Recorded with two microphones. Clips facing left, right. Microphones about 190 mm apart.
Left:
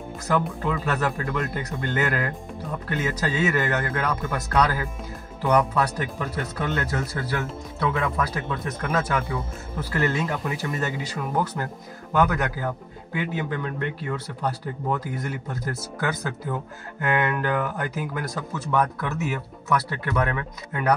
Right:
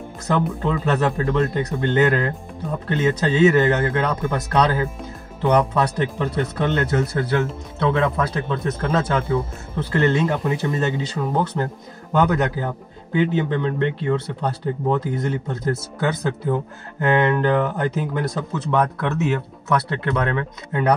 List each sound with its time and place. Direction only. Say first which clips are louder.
0.3 s speech: right 3 dB; 25° right (ahead or behind)